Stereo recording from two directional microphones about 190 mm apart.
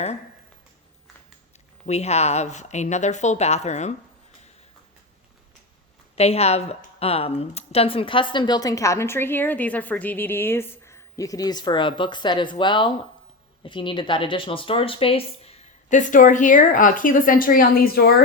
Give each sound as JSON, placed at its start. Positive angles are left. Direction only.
{"t": 1.9, "sound": "speech", "side_deg": 35}
{"t": 6.1, "sound": "speech", "side_deg": 35}